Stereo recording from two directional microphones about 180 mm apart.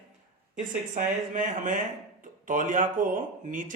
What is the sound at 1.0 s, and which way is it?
Speech, 45° right (ahead or behind).